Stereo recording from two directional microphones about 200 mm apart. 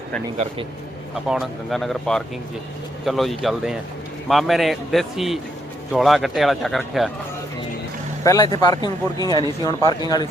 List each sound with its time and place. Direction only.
1.1 s speech: centre (ahead or behind)
8.2 s speech: 15° left (ahead or behind)